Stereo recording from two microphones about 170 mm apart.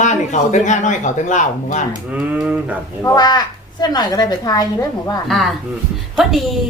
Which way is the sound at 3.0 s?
25° left (ahead or behind).